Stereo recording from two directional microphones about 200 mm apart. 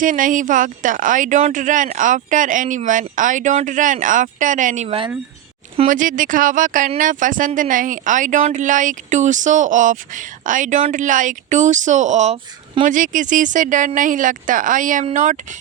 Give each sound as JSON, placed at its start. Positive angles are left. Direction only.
{"t": 0.0, "sound": "speech", "side_deg": -40}